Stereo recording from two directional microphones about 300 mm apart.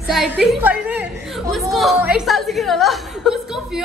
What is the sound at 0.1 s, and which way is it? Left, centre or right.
A woman's voice, centre.